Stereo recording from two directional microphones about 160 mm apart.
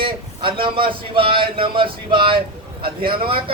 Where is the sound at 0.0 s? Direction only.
30° right (ahead or behind).